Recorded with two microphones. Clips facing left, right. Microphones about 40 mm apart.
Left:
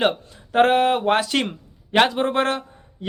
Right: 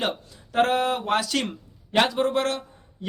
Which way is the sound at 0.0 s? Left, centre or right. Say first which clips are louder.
Left 7 dB; left.